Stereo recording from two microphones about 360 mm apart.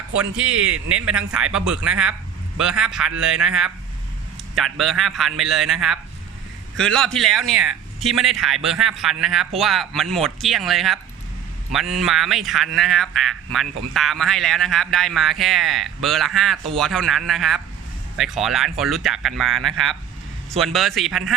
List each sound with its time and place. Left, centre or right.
0.5 s a man's voice: right
1.5 s speech: centre